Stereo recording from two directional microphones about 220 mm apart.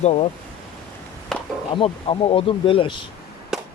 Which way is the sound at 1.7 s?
25° left (ahead or behind).